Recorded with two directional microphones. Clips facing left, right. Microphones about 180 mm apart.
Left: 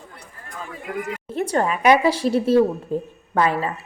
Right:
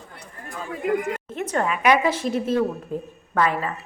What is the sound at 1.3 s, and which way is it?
A woman's voice, 35° left (ahead or behind).